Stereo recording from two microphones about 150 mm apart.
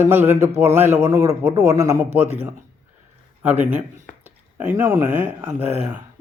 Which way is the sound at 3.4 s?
15° right (ahead or behind).